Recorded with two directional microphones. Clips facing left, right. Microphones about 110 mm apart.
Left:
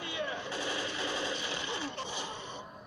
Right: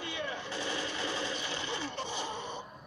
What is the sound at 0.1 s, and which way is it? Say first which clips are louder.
Machine gun: left 3 dB; 25° left (ahead or behind).